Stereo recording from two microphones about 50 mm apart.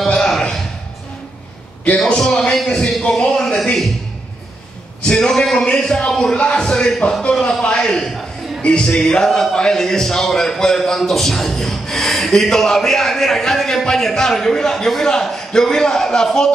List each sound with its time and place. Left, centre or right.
0.2 s a sound: centre
2.0 s a man's voice: centre
5.0 s a man's voice: centre